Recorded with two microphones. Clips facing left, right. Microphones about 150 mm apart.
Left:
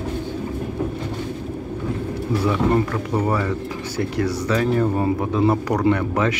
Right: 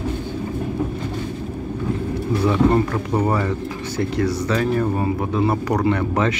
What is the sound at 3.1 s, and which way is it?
Speech, 25° right (ahead or behind).